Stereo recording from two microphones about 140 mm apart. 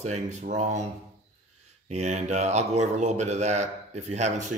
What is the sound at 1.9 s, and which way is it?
Speech, 50° right (ahead or behind).